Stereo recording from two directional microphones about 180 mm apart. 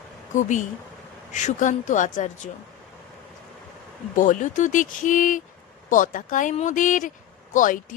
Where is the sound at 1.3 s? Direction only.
40° left (ahead or behind).